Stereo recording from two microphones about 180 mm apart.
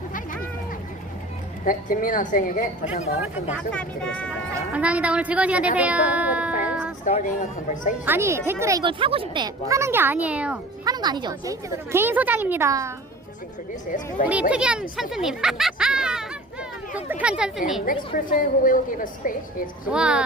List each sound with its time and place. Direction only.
1.6 s a woman's voice: 50° left (ahead or behind)
2.9 s speech: 35° left (ahead or behind)
3.7 s speech: 5° left (ahead or behind)
4.7 s a woman's voice: 5° right (ahead or behind)
7.0 s speech: 45° left (ahead or behind)
8.0 s a woman's voice: 15° right (ahead or behind)
8.8 s a woman's voice: 30° right (ahead or behind); by 10.6 s 5° right (ahead or behind)
10.8 s a woman's voice: 25° right (ahead or behind)
14.5 s speech: 5° right (ahead or behind)
17.8 s a woman's voice: 50° left (ahead or behind)
19.9 s speech: 5° right (ahead or behind)